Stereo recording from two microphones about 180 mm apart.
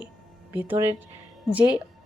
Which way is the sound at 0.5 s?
10° right (ahead or behind).